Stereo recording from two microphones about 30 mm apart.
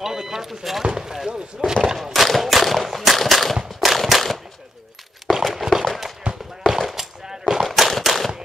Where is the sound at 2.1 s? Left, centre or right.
Centre.